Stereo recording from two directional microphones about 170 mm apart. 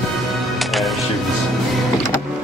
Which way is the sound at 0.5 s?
Centre (ahead or behind).